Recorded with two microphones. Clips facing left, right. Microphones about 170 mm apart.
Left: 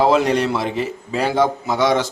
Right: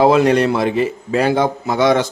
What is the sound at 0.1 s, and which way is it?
A man's voice, 55° right (ahead or behind).